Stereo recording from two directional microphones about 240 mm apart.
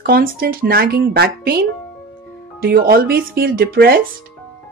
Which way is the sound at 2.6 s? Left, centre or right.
Right.